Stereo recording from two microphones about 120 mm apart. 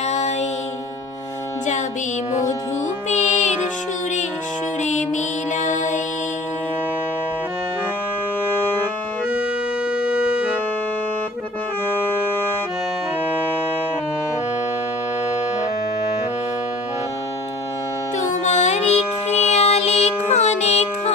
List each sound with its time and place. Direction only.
0.1 s music: 65° left (ahead or behind)
3.1 s music: 75° left (ahead or behind)
4.8 s music: 85° left
9.9 s music: 10° right (ahead or behind)
18.4 s child singing: 75° left (ahead or behind)